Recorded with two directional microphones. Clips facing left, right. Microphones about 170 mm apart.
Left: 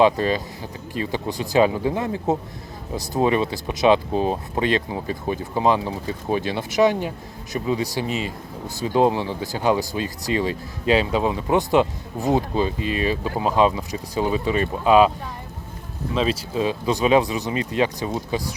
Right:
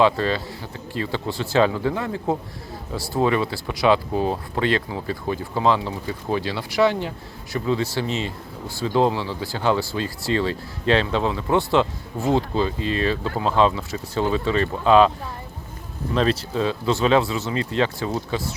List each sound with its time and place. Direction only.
0.0 s speech: 15° left (ahead or behind)
16.1 s speech: 10° left (ahead or behind)